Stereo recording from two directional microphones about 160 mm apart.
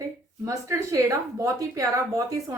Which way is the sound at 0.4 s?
20° right (ahead or behind).